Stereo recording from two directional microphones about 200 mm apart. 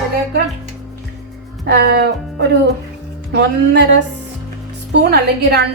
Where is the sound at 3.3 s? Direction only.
60° right (ahead or behind).